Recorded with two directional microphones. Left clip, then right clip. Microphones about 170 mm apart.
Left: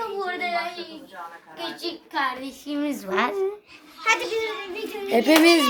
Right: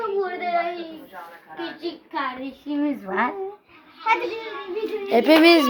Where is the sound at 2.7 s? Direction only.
15° left (ahead or behind).